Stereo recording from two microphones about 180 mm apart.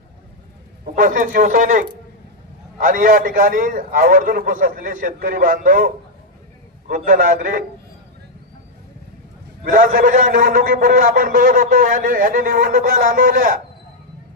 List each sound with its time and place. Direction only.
0.9 s a man's voice: 50° right (ahead or behind)
9.6 s a man's voice: 50° right (ahead or behind)